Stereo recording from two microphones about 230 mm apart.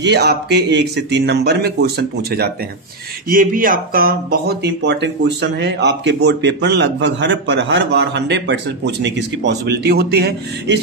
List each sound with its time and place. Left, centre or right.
0.0 s speech: right